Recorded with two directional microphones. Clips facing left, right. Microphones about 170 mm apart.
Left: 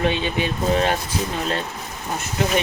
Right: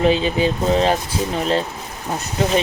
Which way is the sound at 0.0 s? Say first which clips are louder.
Right 5 dB; 30° right (ahead or behind).